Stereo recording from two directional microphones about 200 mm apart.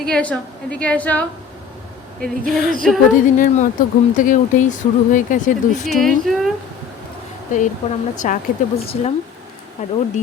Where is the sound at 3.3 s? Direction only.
40° left (ahead or behind).